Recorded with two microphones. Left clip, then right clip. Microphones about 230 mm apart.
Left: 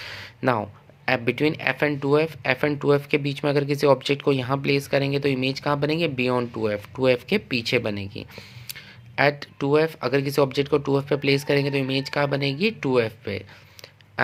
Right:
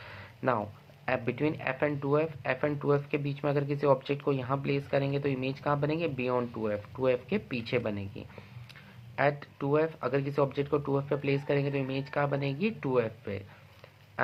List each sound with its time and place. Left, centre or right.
0.0 s speech: left